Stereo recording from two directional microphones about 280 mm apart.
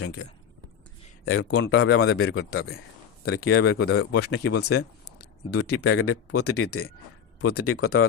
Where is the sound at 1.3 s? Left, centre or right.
Left.